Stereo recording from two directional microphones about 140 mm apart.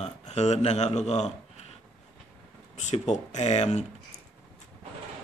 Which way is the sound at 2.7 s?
55° left (ahead or behind).